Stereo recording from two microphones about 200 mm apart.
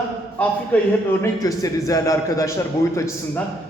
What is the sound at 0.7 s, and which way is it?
A man's voice, 5° left (ahead or behind).